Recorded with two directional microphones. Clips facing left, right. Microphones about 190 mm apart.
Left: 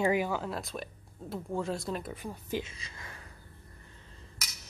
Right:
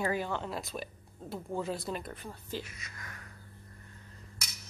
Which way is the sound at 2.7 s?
30° left (ahead or behind).